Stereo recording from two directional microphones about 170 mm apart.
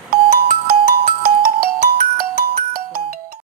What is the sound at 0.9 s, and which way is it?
Music, 60° right (ahead or behind).